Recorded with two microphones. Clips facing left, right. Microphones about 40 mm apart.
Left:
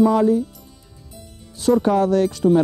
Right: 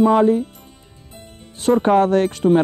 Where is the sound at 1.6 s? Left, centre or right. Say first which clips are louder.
Right 2 dB; right.